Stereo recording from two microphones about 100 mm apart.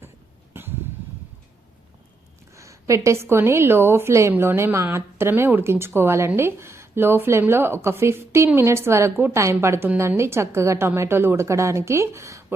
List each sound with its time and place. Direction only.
2.6 s a woman's voice: 30° right (ahead or behind)